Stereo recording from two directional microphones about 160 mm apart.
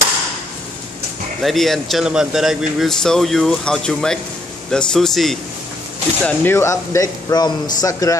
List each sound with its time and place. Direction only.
1.4 s speech: centre (ahead or behind)
6.2 s speech: 15° left (ahead or behind)